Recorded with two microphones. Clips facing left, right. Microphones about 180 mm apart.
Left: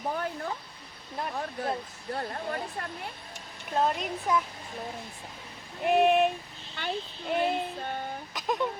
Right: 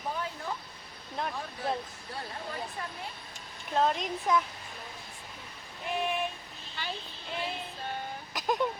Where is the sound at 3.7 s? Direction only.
5° left (ahead or behind).